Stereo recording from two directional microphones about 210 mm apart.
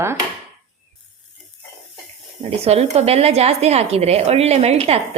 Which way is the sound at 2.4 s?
30° right (ahead or behind).